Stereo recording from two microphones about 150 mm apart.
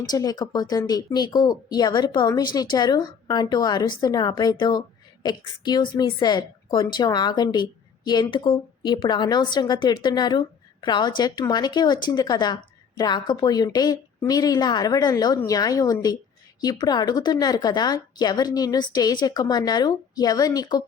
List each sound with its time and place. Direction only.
0.0 s a woman's voice: 25° left (ahead or behind)